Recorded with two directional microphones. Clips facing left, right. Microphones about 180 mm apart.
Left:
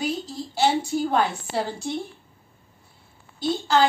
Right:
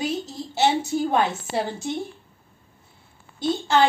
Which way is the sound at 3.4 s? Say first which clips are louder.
Right 1 dB; 20° right (ahead or behind).